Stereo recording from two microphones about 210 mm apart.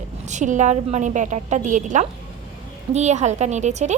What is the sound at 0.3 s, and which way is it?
A woman's voice, 35° right (ahead or behind).